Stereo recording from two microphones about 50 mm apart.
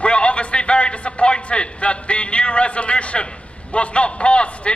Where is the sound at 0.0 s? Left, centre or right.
Left.